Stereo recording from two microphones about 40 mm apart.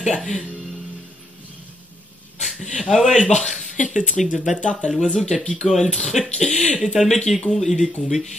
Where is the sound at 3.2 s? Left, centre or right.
Centre.